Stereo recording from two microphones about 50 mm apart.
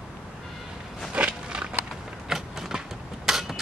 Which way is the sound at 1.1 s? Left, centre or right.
Right.